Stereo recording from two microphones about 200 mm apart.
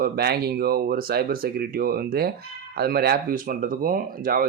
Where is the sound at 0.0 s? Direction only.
50° right (ahead or behind).